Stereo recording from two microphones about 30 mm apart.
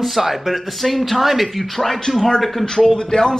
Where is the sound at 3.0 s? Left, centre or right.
Left.